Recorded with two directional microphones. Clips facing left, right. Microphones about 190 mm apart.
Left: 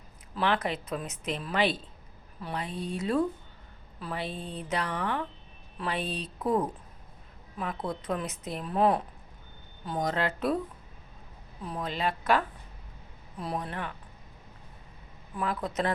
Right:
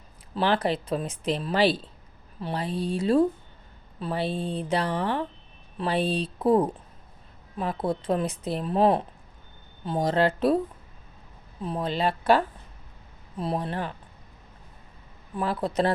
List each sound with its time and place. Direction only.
0.3 s speech: 30° right (ahead or behind)
7.6 s speech: 30° right (ahead or behind)
11.6 s speech: 25° right (ahead or behind)
15.4 s speech: 30° right (ahead or behind)